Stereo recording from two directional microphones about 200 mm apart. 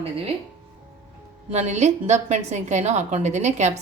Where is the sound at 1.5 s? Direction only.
35° right (ahead or behind).